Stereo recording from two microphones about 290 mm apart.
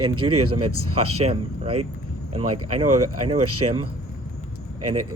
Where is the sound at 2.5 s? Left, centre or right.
Right.